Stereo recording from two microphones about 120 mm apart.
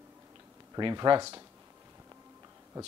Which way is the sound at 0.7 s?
35° right (ahead or behind).